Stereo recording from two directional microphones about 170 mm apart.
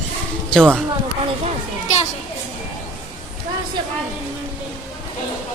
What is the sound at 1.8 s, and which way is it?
Children playing, 40° left (ahead or behind).